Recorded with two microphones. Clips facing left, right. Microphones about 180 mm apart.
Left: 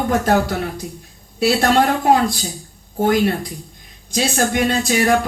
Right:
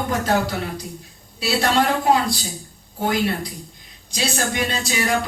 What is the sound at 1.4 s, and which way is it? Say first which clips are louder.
Speech: left 5 dB; 50° left (ahead or behind).